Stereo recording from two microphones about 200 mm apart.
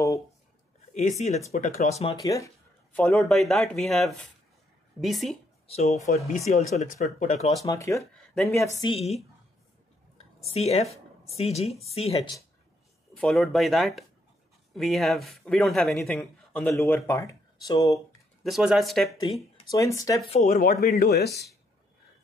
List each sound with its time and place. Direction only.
0.9 s speech: 35° left (ahead or behind)
2.1 s a woman's voice: 15° left (ahead or behind); by 5.4 s centre (ahead or behind)
5.7 s speech: 35° left (ahead or behind)
7.6 s a woman's voice: 15° left (ahead or behind)
8.9 s speech: 30° left (ahead or behind)
10.5 s speech: 30° left (ahead or behind)
13.2 s a man's voice: centre (ahead or behind); by 18.0 s 15° left (ahead or behind)
18.4 s a man's voice: centre (ahead or behind)
19.3 s a woman's voice: 25° left (ahead or behind)
20.2 s speech: 35° left (ahead or behind)
20.8 s speech: 50° left (ahead or behind)